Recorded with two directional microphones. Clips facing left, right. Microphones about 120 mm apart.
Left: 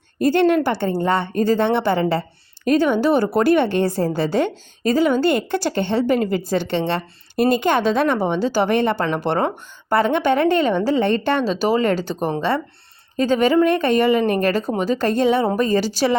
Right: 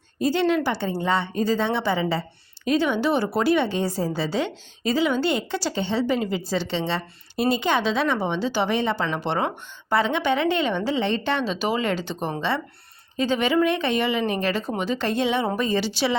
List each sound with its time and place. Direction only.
0.2 s a woman's voice: 55° left (ahead or behind)
2.6 s a woman's voice: 45° left (ahead or behind)